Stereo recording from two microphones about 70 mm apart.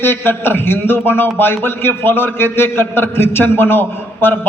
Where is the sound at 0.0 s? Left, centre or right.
Left.